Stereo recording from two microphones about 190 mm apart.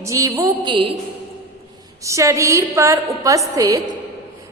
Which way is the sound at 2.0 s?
15° right (ahead or behind).